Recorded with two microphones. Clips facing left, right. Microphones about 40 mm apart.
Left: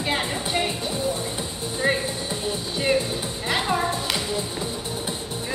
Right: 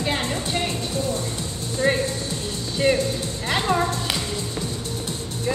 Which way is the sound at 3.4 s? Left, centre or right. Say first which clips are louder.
Right 2 dB; centre.